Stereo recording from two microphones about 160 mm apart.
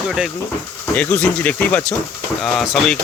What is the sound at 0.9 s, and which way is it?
Speech, 10° left (ahead or behind).